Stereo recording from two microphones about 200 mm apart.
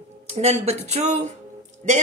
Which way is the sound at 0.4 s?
35° right (ahead or behind).